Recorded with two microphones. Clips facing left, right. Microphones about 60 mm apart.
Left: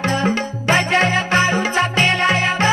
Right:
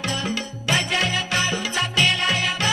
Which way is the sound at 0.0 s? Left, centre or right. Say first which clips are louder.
Left 8 dB; left.